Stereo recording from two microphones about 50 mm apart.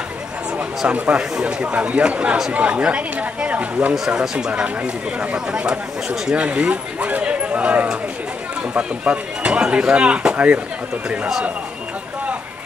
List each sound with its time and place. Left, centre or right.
0.6 s a sound: right
1.1 s speech: centre
4.1 s speech: centre; by 10.6 s right